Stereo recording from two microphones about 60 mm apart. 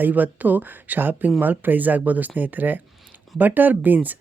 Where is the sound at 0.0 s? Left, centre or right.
Right.